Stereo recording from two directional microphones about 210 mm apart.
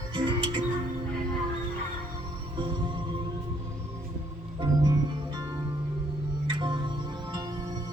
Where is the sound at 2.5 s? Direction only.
25° right (ahead or behind).